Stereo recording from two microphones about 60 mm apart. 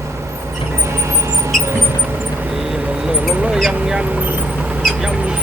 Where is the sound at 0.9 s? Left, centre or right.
Right.